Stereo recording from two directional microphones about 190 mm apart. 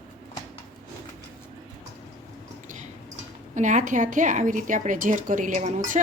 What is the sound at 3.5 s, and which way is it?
A woman's voice, 40° right (ahead or behind).